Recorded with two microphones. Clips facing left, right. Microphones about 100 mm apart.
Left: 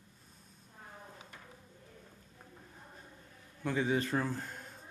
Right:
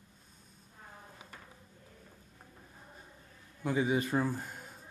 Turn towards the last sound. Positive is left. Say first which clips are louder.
# right 2 dB
turn(degrees=-5)  # may be behind; listen again after turning